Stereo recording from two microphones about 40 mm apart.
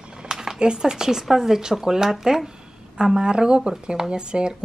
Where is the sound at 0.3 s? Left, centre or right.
Centre.